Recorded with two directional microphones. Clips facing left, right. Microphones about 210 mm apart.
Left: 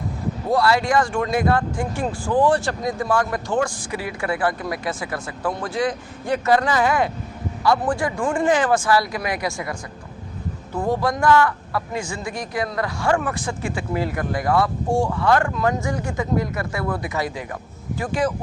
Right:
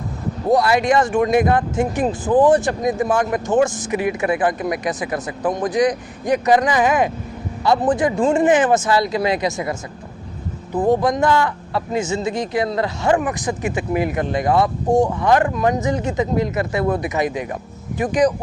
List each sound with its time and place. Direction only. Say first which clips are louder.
0.5 s speech: right 3 dB; 20° right (ahead or behind)
10.8 s a man's voice: right 5 dB; 20° right (ahead or behind)